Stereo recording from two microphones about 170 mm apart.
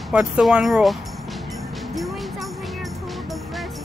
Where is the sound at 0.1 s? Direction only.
5° right (ahead or behind).